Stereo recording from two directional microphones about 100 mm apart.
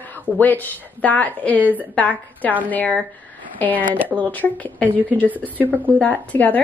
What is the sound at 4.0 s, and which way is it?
Speech, 15° right (ahead or behind).